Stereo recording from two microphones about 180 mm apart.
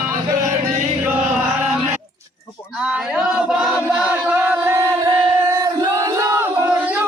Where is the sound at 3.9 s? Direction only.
5° right (ahead or behind).